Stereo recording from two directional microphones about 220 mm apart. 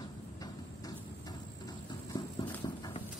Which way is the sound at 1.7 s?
20° left (ahead or behind).